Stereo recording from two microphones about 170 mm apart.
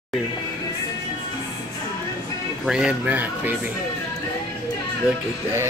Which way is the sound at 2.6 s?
5° right (ahead or behind).